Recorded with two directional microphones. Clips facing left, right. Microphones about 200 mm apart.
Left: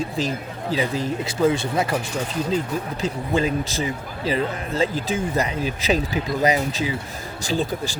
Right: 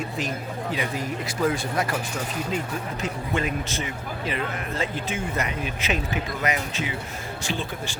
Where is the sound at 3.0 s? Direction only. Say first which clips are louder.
Left 5 dB; 30° left (ahead or behind).